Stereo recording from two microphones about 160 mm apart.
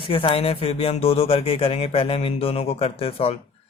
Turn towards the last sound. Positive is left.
turn(degrees=35)  # may be behind; listen again after turning